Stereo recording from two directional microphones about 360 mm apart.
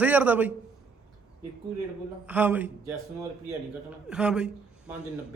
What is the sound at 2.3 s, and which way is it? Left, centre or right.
Speech, centre.